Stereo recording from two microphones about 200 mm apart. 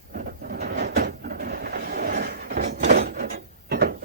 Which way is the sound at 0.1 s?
50° right (ahead or behind).